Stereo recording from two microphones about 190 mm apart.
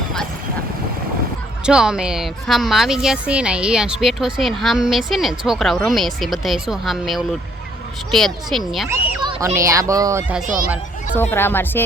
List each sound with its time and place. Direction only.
1.6 s speech: 5° right (ahead or behind)
8.9 s children playing: 15° right (ahead or behind)
9.6 s speech: 15° right (ahead or behind)
10.4 s speech: 45° right (ahead or behind)
11.2 s speech: 10° left (ahead or behind)